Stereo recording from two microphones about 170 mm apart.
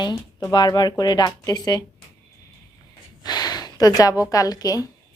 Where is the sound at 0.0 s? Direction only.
25° left (ahead or behind).